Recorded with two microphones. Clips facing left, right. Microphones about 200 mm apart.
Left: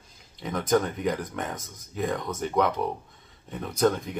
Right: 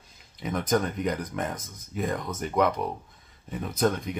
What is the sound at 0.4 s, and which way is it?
Speech, centre (ahead or behind).